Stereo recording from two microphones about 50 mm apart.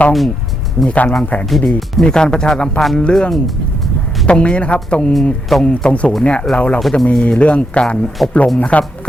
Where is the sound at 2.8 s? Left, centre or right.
Centre.